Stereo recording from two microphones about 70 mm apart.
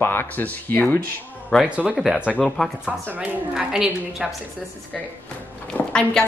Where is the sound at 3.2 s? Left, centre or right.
Centre.